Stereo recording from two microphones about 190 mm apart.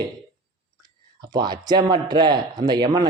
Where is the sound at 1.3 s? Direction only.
20° right (ahead or behind).